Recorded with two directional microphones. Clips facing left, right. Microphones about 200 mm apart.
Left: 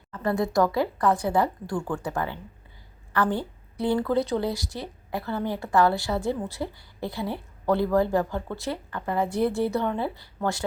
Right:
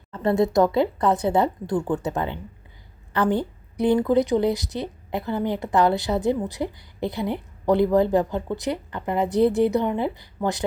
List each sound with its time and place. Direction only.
0.1 s a woman's voice: 25° right (ahead or behind)